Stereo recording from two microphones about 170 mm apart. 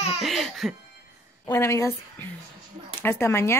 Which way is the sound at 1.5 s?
15° left (ahead or behind).